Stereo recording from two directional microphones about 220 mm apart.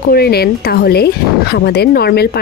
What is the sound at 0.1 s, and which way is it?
A woman's voice, 45° left (ahead or behind).